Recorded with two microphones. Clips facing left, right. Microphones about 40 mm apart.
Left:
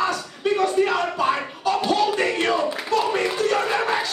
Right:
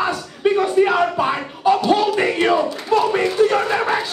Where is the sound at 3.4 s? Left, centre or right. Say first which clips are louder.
Right 6 dB; centre.